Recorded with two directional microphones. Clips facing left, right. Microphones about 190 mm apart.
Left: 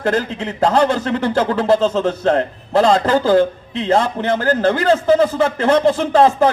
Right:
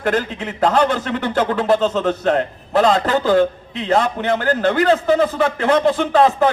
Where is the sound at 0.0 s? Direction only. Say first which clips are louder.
Left 1 dB; 25° left (ahead or behind).